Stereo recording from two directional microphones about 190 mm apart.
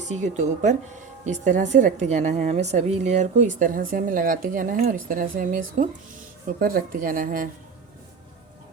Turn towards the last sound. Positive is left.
turn(degrees=-45)  # may be behind; listen again after turning